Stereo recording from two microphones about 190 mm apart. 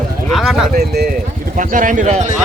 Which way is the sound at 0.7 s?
55° right (ahead or behind).